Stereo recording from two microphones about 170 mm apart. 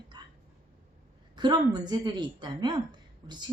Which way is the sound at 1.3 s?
25° right (ahead or behind).